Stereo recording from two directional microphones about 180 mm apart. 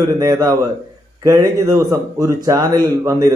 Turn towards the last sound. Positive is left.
turn(degrees=-20)  # may be behind; listen again after turning